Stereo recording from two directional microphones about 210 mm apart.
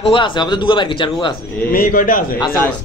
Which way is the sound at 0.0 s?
25° left (ahead or behind).